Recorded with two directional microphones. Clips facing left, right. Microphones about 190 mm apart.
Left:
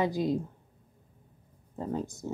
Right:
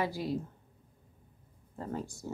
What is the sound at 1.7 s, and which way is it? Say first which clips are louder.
Speech: left 5 dB; 20° left (ahead or behind).